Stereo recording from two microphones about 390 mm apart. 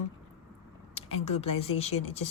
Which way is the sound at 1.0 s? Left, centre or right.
Centre.